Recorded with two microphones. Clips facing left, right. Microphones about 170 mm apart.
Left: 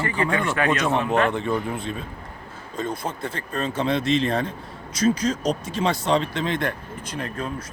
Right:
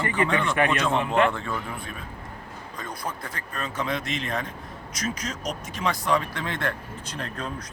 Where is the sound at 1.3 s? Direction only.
20° left (ahead or behind).